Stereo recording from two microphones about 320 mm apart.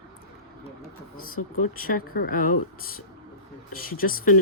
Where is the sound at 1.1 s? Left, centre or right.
Left.